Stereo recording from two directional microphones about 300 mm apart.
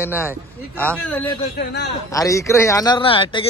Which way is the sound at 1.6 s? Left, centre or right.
Left.